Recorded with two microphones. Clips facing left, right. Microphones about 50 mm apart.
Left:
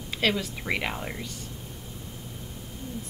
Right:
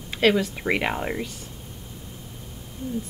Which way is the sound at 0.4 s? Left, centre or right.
Centre.